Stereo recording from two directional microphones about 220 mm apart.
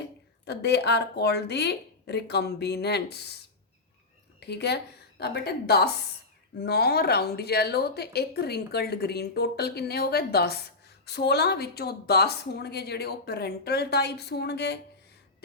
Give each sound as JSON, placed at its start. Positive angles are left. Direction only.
{"t": 0.4, "sound": "a woman's voice", "side_deg": 50}